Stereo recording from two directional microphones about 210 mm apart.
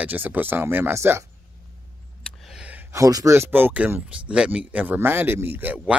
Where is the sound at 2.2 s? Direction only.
Centre (ahead or behind).